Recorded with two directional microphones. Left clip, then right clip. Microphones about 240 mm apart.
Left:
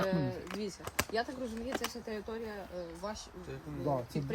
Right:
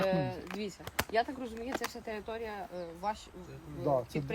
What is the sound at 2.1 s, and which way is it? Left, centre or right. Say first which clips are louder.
Speech: right 2 dB; right.